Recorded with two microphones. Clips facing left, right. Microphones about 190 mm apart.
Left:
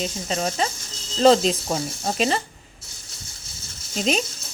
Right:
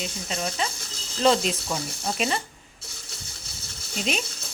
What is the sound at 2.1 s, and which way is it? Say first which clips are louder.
Speech: left 5 dB; 30° left (ahead or behind).